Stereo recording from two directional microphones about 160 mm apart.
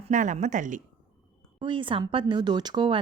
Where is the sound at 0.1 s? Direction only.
50° right (ahead or behind).